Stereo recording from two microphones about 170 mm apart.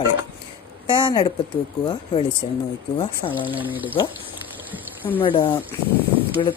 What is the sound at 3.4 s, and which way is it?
Speech, 10° right (ahead or behind).